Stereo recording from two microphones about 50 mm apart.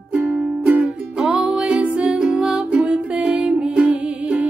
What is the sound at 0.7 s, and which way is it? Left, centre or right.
Music, centre.